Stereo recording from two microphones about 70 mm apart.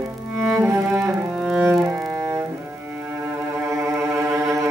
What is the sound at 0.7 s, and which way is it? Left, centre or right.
Cello, right.